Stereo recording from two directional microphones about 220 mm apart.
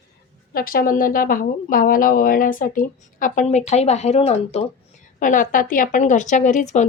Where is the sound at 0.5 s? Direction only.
40° left (ahead or behind).